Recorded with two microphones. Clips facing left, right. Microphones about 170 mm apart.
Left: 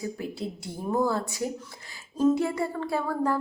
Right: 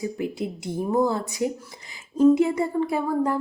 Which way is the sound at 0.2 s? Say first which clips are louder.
Right 5 dB; 20° right (ahead or behind).